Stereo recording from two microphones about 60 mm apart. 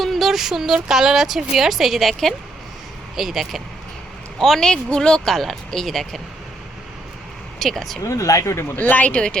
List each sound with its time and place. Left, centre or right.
0.0 s a man's voice: centre
7.6 s speech: centre
8.0 s speech: left
8.7 s speech: left